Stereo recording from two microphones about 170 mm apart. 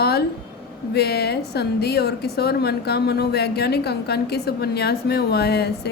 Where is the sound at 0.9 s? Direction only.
70° left (ahead or behind).